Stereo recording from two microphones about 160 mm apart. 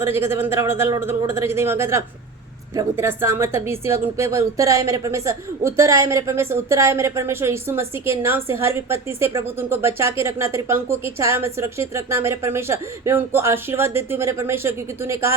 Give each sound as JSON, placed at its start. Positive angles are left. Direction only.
{"t": 0.0, "sound": "a woman's voice", "side_deg": -15}